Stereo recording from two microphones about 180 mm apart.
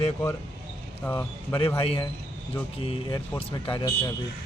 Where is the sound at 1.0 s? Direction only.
15° left (ahead or behind).